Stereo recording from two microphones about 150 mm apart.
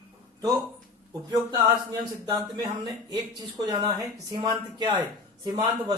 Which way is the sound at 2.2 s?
35° right (ahead or behind).